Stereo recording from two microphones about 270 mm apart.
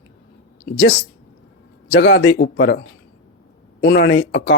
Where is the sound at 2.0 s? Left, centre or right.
Left.